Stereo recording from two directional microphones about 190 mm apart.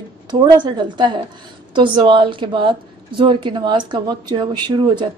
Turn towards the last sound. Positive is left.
turn(degrees=-20)  # may be behind; listen again after turning